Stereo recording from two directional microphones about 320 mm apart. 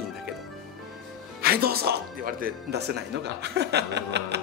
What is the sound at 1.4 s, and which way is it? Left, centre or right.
Speech, right.